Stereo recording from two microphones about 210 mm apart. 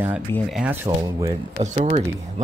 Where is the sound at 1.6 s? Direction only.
35° right (ahead or behind).